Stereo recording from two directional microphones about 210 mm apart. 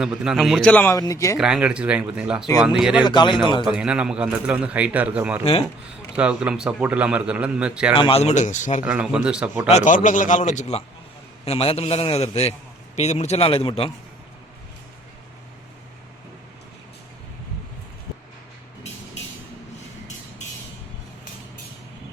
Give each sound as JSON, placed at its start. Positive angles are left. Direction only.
{"t": 0.0, "sound": "a man's voice", "side_deg": -5}
{"t": 1.4, "sound": "a man's voice", "side_deg": -5}
{"t": 3.0, "sound": "a man's voice", "side_deg": 20}
{"t": 3.6, "sound": "a man's voice", "side_deg": -5}
{"t": 7.9, "sound": "a man's voice", "side_deg": 25}
{"t": 8.8, "sound": "a man's voice", "side_deg": -5}
{"t": 9.6, "sound": "a man's voice", "side_deg": 35}